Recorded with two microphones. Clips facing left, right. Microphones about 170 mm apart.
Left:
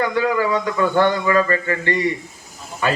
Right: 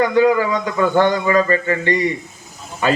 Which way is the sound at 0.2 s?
20° right (ahead or behind).